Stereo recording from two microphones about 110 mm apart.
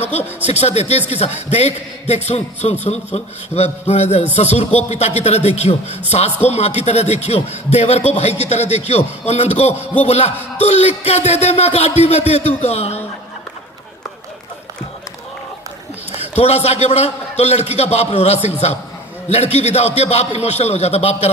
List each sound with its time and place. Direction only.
0.5 s a man's voice: 75° left (ahead or behind)
16.1 s a man's voice: 70° left (ahead or behind)